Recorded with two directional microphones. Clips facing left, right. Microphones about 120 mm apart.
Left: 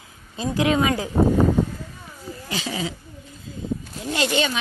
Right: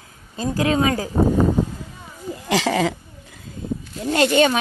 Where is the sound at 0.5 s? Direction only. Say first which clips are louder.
Right 1 dB; 35° right (ahead or behind).